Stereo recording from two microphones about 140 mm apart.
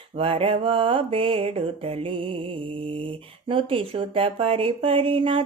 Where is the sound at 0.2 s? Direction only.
40° right (ahead or behind).